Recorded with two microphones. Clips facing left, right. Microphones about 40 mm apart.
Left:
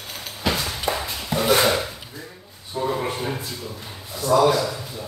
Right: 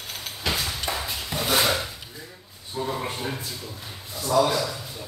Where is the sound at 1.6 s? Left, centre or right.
Centre.